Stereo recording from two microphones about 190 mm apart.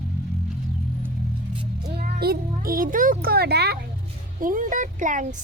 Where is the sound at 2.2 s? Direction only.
50° right (ahead or behind).